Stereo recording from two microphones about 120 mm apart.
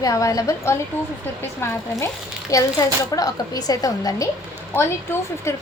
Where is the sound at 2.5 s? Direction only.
30° left (ahead or behind).